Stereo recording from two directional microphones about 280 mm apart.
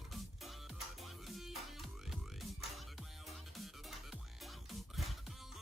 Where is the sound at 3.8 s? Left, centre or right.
Centre.